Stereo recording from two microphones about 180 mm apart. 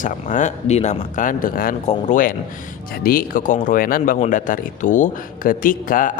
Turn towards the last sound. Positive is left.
turn(degrees=50)  # may be behind; listen again after turning